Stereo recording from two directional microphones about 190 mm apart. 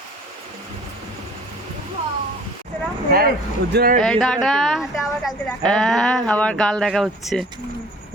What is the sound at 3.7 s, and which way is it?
Speech, 50° right (ahead or behind).